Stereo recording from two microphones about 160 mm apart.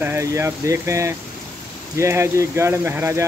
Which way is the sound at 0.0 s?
15° right (ahead or behind).